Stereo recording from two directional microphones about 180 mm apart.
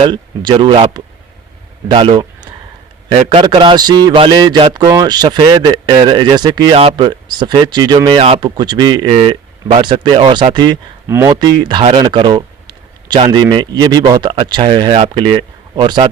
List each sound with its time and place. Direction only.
0.0 s a man's voice: 30° right (ahead or behind)